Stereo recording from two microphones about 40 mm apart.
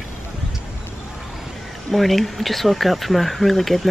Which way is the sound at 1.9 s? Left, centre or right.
Centre.